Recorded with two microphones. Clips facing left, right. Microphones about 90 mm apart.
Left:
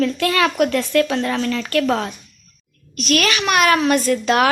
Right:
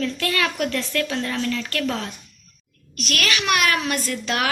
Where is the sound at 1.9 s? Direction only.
80° left.